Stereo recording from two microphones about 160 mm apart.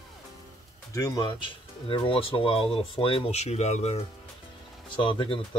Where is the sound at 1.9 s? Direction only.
35° left (ahead or behind).